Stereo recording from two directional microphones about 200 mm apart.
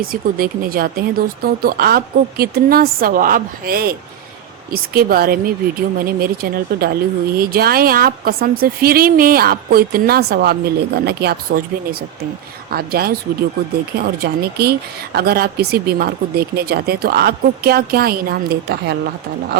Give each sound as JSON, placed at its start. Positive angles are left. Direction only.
{"t": 0.0, "sound": "a woman's voice", "side_deg": -45}